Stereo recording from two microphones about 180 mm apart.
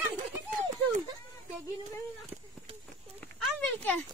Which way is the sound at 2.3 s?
5° right (ahead or behind).